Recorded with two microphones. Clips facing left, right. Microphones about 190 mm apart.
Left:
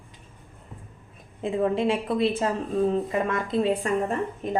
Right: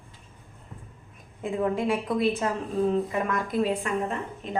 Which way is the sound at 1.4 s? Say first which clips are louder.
Left 3 dB; 25° left (ahead or behind).